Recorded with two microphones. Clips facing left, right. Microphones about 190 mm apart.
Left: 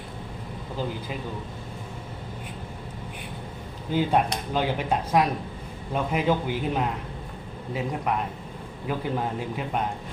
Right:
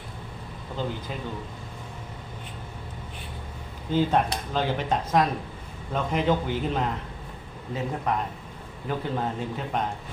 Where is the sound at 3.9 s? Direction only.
10° left (ahead or behind).